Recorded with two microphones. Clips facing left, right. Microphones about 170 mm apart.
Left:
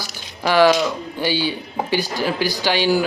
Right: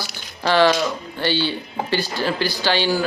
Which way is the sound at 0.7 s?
Centre (ahead or behind).